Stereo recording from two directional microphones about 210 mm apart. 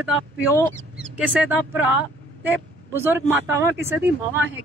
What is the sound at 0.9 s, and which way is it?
Speech, 5° right (ahead or behind).